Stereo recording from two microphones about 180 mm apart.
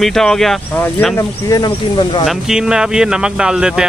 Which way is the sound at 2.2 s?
5° right (ahead or behind).